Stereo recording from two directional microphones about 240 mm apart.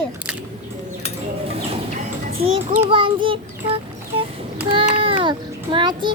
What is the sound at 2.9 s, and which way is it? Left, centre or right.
Speech, right.